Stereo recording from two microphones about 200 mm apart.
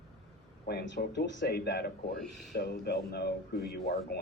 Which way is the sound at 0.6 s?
55° left (ahead or behind).